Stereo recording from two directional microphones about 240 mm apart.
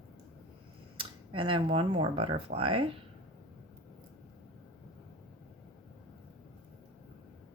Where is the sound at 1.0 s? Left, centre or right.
Right.